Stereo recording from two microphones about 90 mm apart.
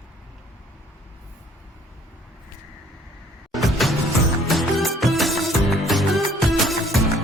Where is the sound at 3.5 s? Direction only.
Centre (ahead or behind).